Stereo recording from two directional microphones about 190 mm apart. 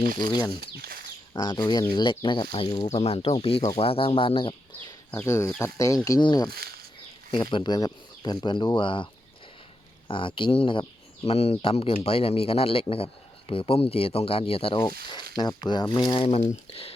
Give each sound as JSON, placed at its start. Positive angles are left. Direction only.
{"t": 0.3, "sound": "speech", "side_deg": 25}
{"t": 5.1, "sound": "speech", "side_deg": 15}
{"t": 6.5, "sound": "speech", "side_deg": -55}
{"t": 7.3, "sound": "speech", "side_deg": 25}
{"t": 10.1, "sound": "a man's voice", "side_deg": 25}